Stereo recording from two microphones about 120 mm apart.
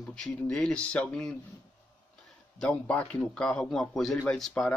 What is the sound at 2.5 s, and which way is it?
Speech, 10° left (ahead or behind).